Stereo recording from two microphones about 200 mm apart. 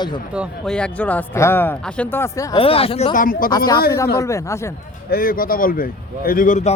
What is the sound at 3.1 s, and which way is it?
Speech, 45° left (ahead or behind).